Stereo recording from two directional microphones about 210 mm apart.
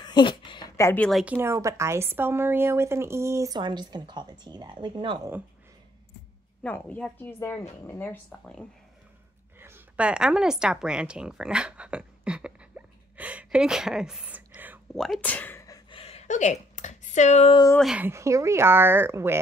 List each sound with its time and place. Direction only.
0.0 s a woman's voice: 20° left (ahead or behind); by 1.2 s 5° left (ahead or behind)
1.2 s speech: 10° right (ahead or behind)
6.6 s speech: 5° left (ahead or behind)
9.6 s a sound: 10° right (ahead or behind); by 17.6 s 30° left (ahead or behind)
17.7 s speech: 5° right (ahead or behind)